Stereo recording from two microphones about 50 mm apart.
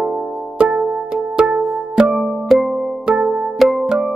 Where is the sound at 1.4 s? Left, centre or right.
Right.